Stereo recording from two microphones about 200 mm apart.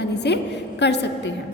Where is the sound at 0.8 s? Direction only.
60° left (ahead or behind).